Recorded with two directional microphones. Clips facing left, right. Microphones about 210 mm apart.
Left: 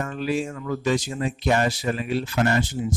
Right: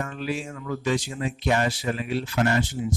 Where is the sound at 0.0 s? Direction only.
40° left (ahead or behind).